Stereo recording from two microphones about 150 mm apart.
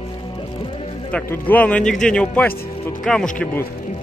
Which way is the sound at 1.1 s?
10° left (ahead or behind).